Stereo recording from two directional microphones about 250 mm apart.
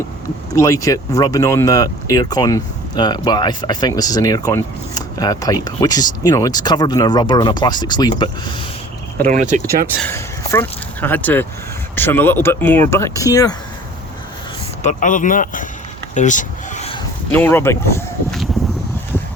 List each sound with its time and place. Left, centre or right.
0.5 s speech: centre
9.2 s speech: right
9.9 s speech: centre
14.8 s speech: left
16.1 s a sound: left
17.3 s speech: centre